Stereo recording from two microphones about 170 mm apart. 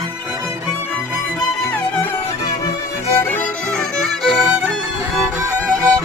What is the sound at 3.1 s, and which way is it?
Music, 10° left (ahead or behind).